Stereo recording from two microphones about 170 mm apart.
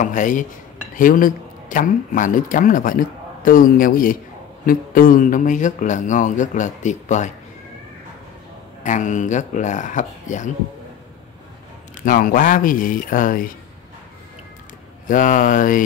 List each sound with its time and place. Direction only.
0.0 s speech: 50° left (ahead or behind)
8.8 s speech: 45° left (ahead or behind)
12.0 s speech: 55° left (ahead or behind)
15.0 s speech: 50° left (ahead or behind)